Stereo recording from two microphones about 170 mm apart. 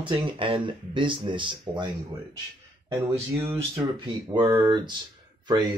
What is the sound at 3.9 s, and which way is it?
Speech, 30° right (ahead or behind).